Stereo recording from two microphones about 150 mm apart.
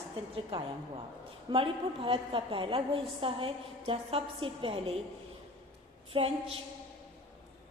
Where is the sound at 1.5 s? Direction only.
35° right (ahead or behind).